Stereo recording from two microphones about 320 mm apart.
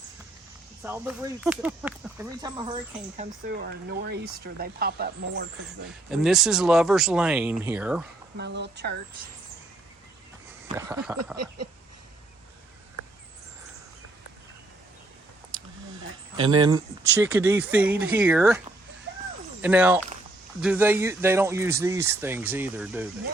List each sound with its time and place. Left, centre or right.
0.8 s speech: centre
3.4 s speech: right
6.1 s speech: centre
8.4 s speech: right
10.8 s speech: centre
11.3 s speech: right
16.4 s speech: centre
19.6 s speech: centre